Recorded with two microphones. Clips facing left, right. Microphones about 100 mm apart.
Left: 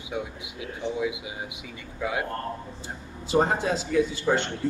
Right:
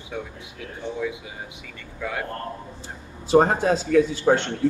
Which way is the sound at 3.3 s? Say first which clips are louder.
Right 5 dB; 45° right (ahead or behind).